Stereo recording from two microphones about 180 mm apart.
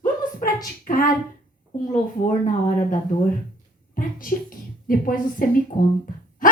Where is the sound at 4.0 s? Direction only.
50° left (ahead or behind).